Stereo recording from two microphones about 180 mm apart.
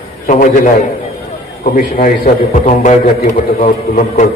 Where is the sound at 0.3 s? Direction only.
45° left (ahead or behind).